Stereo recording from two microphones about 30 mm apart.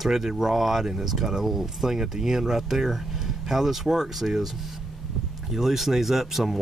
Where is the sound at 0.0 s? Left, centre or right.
Centre.